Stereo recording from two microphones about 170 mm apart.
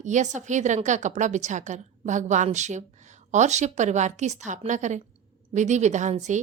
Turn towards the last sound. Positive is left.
turn(degrees=-45)  # may be behind; listen again after turning